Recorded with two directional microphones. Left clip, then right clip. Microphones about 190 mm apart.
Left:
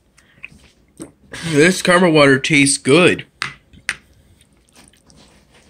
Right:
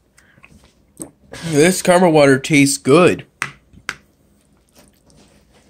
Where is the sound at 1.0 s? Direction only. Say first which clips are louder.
Even; 10° right (ahead or behind).